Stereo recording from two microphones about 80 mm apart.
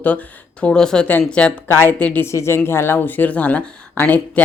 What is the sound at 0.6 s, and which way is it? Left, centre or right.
Speech, centre.